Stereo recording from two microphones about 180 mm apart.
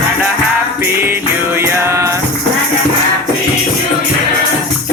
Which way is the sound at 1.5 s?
15° right (ahead or behind).